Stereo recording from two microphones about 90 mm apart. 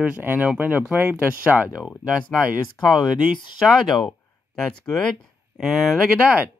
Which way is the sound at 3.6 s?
5° left (ahead or behind).